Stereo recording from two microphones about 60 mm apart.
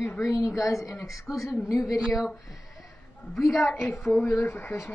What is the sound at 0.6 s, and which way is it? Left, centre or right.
A woman's voice, left.